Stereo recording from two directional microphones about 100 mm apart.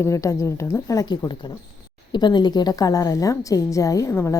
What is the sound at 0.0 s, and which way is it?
A woman's voice, 30° left (ahead or behind).